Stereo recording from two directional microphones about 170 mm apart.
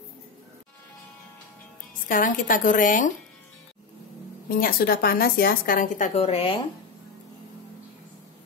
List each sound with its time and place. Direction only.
2.0 s a woman's voice: 50° left (ahead or behind)
4.5 s a woman's voice: 55° left (ahead or behind); by 6.6 s 35° left (ahead or behind)